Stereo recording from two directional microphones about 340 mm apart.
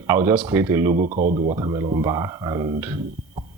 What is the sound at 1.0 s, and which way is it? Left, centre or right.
Speech, right.